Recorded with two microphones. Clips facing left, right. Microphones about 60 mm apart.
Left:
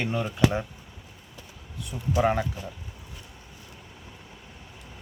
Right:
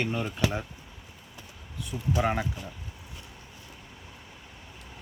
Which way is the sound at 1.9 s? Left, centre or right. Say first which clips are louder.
Right 1 dB; centre.